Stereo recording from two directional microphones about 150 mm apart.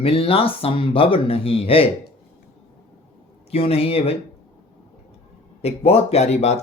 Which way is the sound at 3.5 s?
40° left (ahead or behind).